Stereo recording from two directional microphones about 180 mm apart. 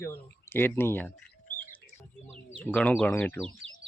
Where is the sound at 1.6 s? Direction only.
10° left (ahead or behind).